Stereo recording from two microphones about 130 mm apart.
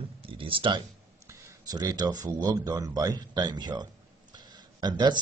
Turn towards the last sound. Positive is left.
turn(degrees=-35)  # may be behind; listen again after turning